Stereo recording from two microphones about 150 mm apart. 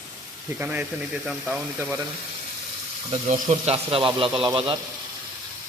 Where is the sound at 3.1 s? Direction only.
55° right (ahead or behind).